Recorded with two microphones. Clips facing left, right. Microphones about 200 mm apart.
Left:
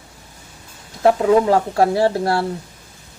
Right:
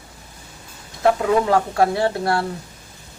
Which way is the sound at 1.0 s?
30° left (ahead or behind).